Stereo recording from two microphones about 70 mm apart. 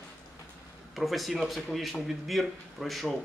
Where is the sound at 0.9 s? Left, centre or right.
Centre.